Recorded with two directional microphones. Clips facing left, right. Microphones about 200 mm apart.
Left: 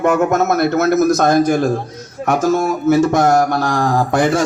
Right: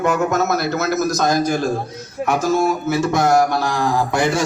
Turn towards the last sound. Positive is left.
turn(degrees=50)  # may be behind; listen again after turning